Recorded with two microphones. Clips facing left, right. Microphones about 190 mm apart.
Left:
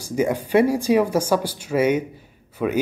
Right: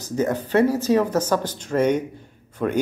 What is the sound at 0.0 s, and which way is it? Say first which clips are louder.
Speech: left 1 dB; 10° left (ahead or behind).